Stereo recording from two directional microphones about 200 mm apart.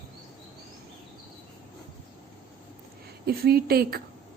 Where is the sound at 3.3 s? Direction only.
50° right (ahead or behind).